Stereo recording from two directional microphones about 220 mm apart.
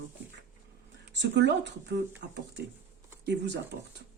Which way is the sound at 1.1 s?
50° right (ahead or behind).